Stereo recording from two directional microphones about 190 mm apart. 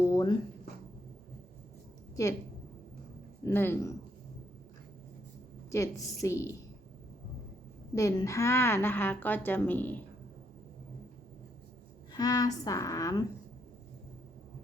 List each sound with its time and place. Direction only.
0.0 s a sound: 15° left (ahead or behind)
2.2 s a woman's voice: 20° left (ahead or behind)
3.4 s a woman's voice: 10° left (ahead or behind)
5.7 s a woman's voice: 15° left (ahead or behind)
7.9 s a woman's voice: 15° left (ahead or behind)
12.1 s a woman's voice: 20° left (ahead or behind)